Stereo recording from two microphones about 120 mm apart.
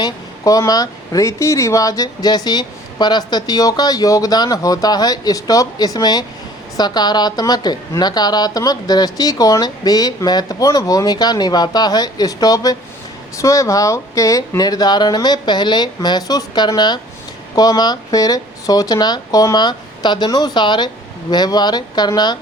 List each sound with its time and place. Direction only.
0.0 s speech: 30° left (ahead or behind)